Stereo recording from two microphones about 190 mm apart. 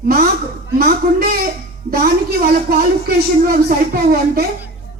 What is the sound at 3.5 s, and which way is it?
Speech, 50° right (ahead or behind).